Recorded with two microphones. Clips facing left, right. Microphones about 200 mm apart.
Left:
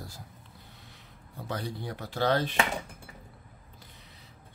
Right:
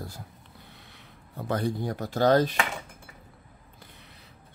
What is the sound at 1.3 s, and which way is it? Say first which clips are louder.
Speech: right 7 dB; 50° right (ahead or behind).